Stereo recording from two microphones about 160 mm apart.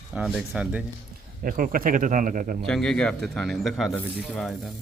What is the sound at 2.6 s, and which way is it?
A man's voice, 5° left (ahead or behind).